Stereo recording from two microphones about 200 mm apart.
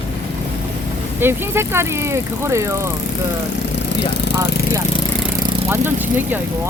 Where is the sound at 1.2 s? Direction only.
10° right (ahead or behind).